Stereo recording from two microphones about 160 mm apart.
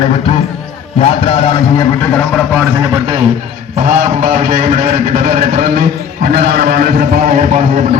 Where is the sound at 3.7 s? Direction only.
55° right (ahead or behind).